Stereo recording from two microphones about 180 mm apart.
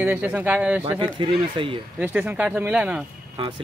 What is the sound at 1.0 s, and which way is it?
Speech, 30° right (ahead or behind).